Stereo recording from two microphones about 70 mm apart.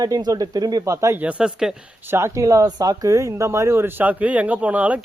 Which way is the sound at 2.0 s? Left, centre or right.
Right.